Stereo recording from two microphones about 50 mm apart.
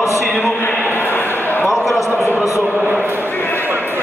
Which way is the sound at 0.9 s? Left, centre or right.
Left.